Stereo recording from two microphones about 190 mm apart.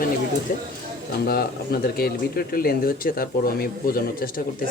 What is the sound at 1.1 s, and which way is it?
Speech, 55° left (ahead or behind).